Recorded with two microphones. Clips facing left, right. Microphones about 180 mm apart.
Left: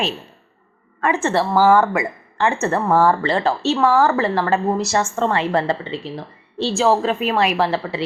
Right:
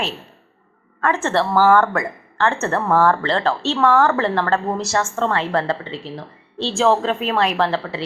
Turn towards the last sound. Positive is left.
turn(degrees=10)  # may be behind; listen again after turning